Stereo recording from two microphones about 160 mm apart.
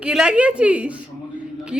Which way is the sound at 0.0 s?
5° right (ahead or behind).